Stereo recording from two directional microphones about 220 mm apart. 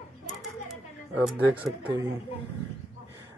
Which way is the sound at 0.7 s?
5° right (ahead or behind).